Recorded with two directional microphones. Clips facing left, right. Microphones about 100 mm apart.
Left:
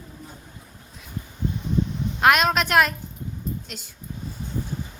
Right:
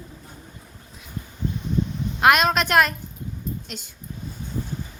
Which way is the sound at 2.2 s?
Centre (ahead or behind).